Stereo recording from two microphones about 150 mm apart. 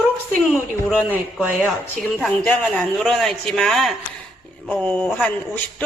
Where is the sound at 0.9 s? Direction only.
10° left (ahead or behind).